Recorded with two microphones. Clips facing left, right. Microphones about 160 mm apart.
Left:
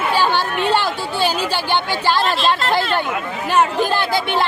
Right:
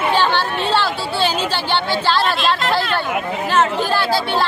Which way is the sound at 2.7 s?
20° left (ahead or behind).